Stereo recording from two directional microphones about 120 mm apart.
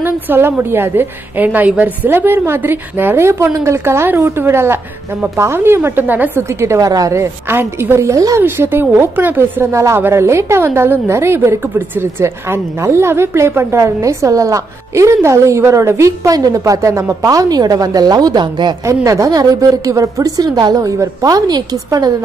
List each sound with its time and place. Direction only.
0.0 s a woman's voice: 15° right (ahead or behind); by 18.8 s 35° right (ahead or behind)
18.9 s a woman's voice: 25° right (ahead or behind)